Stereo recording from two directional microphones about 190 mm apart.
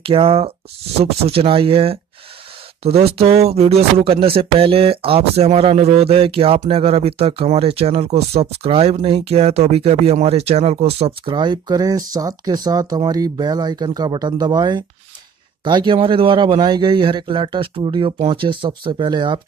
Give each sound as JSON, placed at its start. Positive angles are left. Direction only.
{"t": 0.0, "sound": "a man's voice", "side_deg": -30}